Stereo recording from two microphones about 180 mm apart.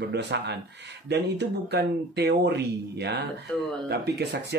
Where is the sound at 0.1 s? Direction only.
70° right (ahead or behind).